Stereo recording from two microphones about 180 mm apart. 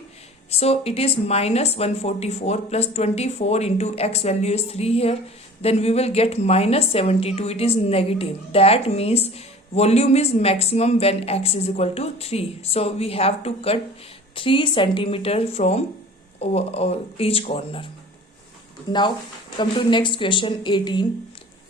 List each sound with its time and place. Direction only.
0.5 s a woman's voice: 35° left (ahead or behind)
18.9 s a woman's voice: 25° left (ahead or behind)